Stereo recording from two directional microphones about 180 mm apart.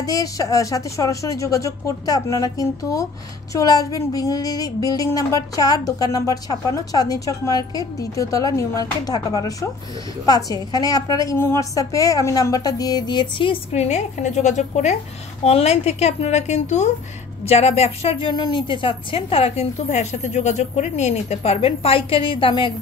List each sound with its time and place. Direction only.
0.0 s a woman's voice: 20° left (ahead or behind)